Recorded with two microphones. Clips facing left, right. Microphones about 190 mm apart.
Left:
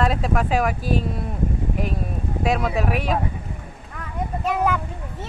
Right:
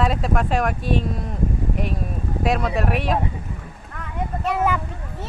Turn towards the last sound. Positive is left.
turn(degrees=0)  # may be behind; listen again after turning